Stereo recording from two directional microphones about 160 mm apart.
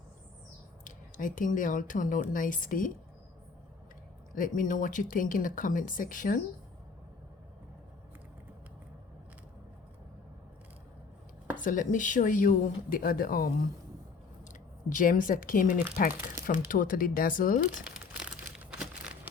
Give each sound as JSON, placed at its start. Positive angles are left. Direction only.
{"t": 0.9, "sound": "speech", "side_deg": 55}
{"t": 4.4, "sound": "speech", "side_deg": 60}
{"t": 11.5, "sound": "speech", "side_deg": 55}
{"t": 17.9, "sound": "crumpling", "side_deg": -5}